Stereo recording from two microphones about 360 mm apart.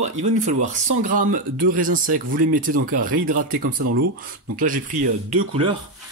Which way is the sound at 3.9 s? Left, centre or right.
Right.